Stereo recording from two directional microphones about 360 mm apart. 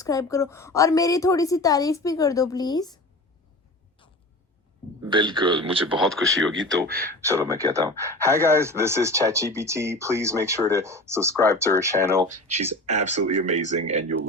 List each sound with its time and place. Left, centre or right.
0.0 s a woman's voice: centre
5.0 s speech: centre
6.1 s speech: centre
6.7 s speech: right
7.3 s speech: centre
12.6 s speech: centre